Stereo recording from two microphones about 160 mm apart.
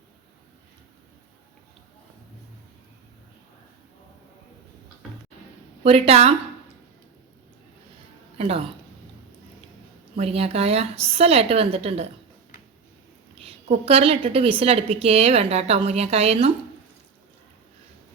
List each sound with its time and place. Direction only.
5.8 s a woman's voice: 40° right (ahead or behind)
8.4 s speech: 40° right (ahead or behind)
10.2 s a woman's voice: 40° right (ahead or behind)
13.4 s a woman's voice: 40° right (ahead or behind)